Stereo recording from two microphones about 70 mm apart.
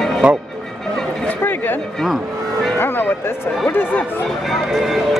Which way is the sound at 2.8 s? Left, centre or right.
Left.